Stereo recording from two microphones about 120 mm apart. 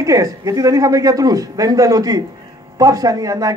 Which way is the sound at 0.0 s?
25° right (ahead or behind).